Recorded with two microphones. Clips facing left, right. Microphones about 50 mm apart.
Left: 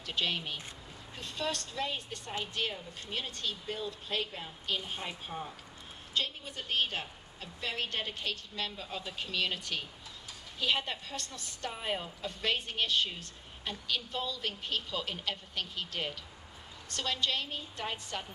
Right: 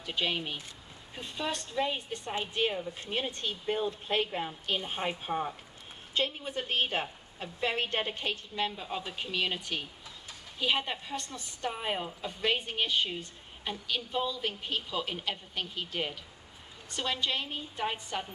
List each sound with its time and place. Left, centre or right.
0.0 s a woman's voice: centre